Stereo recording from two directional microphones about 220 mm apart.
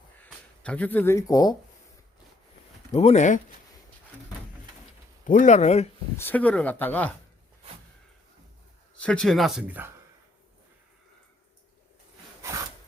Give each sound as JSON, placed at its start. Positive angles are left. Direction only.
{"t": 0.2, "sound": "speech", "side_deg": 5}
{"t": 2.9, "sound": "speech", "side_deg": 30}
{"t": 5.2, "sound": "speech", "side_deg": 35}
{"t": 6.1, "sound": "speech", "side_deg": 10}
{"t": 9.0, "sound": "speech", "side_deg": 5}
{"t": 12.4, "sound": "wood", "side_deg": -15}